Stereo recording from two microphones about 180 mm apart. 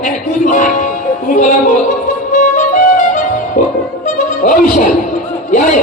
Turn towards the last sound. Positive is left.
turn(degrees=45)  # may be behind; listen again after turning